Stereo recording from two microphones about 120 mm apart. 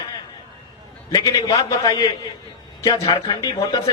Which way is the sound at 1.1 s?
30° left (ahead or behind).